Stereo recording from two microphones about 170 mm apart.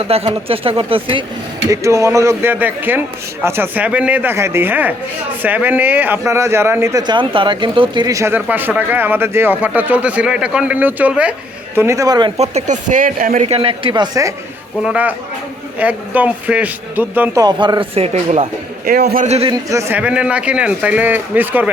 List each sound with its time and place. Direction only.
0.0 s speech: 35° right (ahead or behind)
1.7 s speech: 20° right (ahead or behind)
12.4 s speech: 45° right (ahead or behind)
13.4 s speech: 35° right (ahead or behind)
14.8 s speech: 10° right (ahead or behind)
17.4 s speech: 25° right (ahead or behind)
18.9 s a man's voice: 65° right (ahead or behind)
19.2 s speech: 40° right (ahead or behind)
19.5 s speech: 15° right (ahead or behind)